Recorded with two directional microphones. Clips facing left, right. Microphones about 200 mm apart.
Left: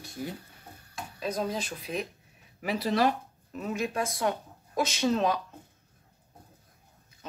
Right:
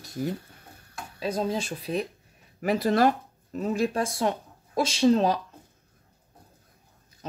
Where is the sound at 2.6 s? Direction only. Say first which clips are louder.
Right 4 dB; 50° right (ahead or behind).